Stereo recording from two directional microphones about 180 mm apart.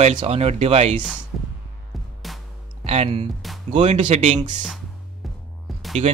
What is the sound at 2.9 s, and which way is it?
Speech, 35° right (ahead or behind).